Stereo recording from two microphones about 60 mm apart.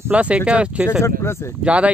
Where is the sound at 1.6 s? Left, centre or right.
Right.